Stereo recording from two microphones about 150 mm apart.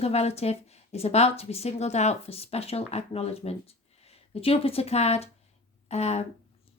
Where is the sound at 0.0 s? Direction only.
45° left (ahead or behind).